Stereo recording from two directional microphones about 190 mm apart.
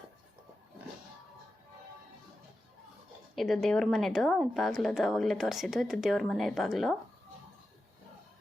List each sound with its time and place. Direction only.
3.3 s a woman's voice: centre (ahead or behind)